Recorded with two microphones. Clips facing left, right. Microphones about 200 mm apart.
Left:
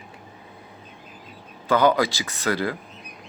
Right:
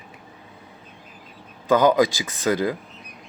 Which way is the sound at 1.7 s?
15° right (ahead or behind).